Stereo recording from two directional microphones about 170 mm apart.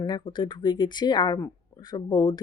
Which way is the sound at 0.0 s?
25° left (ahead or behind).